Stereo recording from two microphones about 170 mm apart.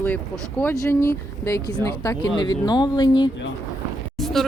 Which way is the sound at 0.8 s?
15° left (ahead or behind).